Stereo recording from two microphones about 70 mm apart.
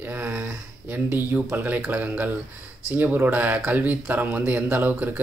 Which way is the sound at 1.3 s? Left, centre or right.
Right.